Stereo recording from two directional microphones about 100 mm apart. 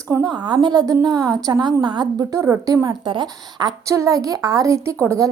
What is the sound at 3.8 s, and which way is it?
A woman's voice, 30° right (ahead or behind).